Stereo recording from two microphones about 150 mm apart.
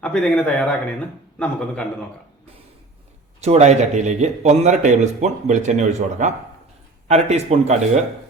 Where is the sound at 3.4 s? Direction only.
50° right (ahead or behind).